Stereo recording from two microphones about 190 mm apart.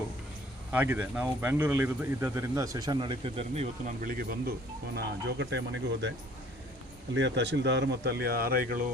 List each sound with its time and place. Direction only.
0.7 s speech: 10° right (ahead or behind); by 3.7 s 30° right (ahead or behind)
4.0 s speech: 50° right (ahead or behind)
4.9 s speech: 65° right (ahead or behind)